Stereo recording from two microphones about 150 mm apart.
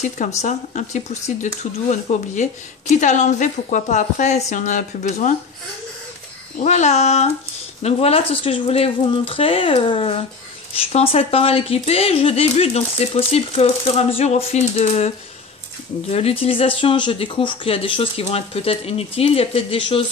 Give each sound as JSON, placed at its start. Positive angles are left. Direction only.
{"t": 0.4, "sound": "speech", "side_deg": 50}
{"t": 6.6, "sound": "speech", "side_deg": 50}